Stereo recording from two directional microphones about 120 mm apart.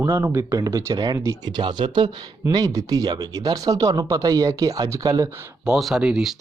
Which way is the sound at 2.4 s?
30° right (ahead or behind).